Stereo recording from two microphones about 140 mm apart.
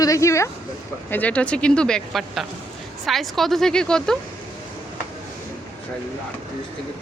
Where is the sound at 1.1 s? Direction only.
10° left (ahead or behind).